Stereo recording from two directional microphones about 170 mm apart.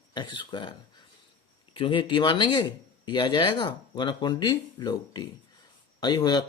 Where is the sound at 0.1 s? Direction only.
25° left (ahead or behind).